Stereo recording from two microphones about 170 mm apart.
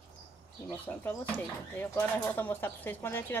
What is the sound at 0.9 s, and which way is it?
Speech, 10° left (ahead or behind).